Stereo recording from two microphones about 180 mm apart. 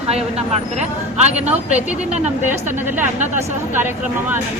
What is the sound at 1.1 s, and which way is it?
Speech, 40° right (ahead or behind).